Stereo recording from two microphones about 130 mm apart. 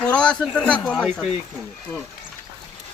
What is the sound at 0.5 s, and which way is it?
Speech, 10° left (ahead or behind).